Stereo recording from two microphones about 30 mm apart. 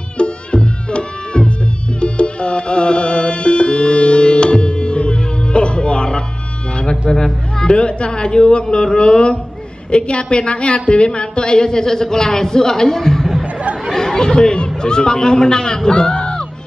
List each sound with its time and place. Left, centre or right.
0.2 s music: left
7.0 s a woman's voice: left
7.7 s a woman's voice: left
15.9 s music: left